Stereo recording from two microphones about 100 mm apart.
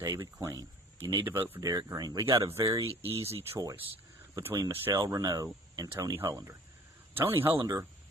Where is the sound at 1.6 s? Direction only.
35° right (ahead or behind).